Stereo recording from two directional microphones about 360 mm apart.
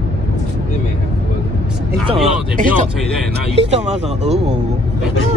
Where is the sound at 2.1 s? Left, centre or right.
Centre.